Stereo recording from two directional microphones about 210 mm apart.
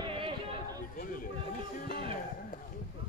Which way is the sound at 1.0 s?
40° left (ahead or behind).